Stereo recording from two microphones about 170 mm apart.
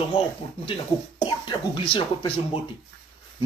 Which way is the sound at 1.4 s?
25° left (ahead or behind).